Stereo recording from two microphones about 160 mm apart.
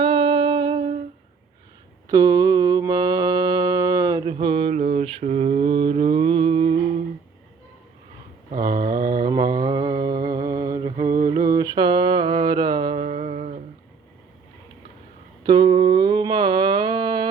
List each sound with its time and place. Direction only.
0.0 s music: 30° right (ahead or behind)
2.0 s mantra: 25° right (ahead or behind)
8.6 s mantra: 55° right (ahead or behind)
9.2 s mantra: 25° right (ahead or behind)
13.0 s a sound: 45° right (ahead or behind)
15.4 s mantra: 30° right (ahead or behind)